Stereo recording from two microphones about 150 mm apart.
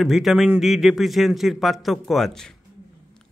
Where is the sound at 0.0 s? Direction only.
Centre (ahead or behind).